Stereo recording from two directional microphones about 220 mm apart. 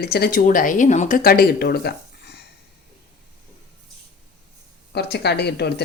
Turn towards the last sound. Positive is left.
turn(degrees=50)  # may be behind; listen again after turning